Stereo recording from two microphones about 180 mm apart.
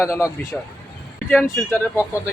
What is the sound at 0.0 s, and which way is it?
Speech, 15° left (ahead or behind).